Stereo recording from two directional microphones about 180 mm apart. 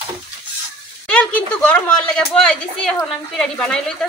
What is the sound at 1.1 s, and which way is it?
A woman's voice, 10° left (ahead or behind).